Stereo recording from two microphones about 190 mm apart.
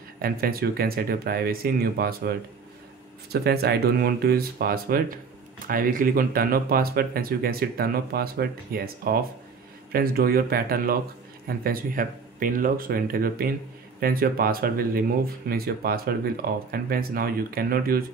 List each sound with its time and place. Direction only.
0.2 s speech: 50° right (ahead or behind)